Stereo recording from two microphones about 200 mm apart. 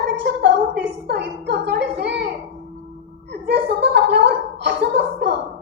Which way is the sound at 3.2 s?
60° right (ahead or behind).